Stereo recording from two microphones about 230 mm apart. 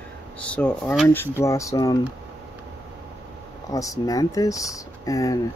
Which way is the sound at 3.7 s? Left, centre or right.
Centre.